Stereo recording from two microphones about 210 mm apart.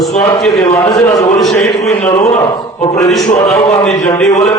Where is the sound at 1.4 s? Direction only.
Centre (ahead or behind).